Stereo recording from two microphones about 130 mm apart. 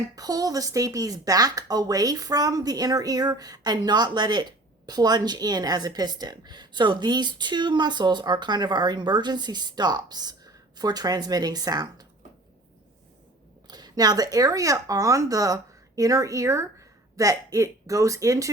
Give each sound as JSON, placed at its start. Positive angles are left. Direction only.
{"t": 0.2, "sound": "a woman's voice", "side_deg": -30}
{"t": 13.7, "sound": "a woman's voice", "side_deg": -30}